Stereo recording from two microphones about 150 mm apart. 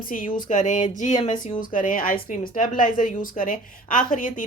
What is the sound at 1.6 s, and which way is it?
Speech, 65° left (ahead or behind).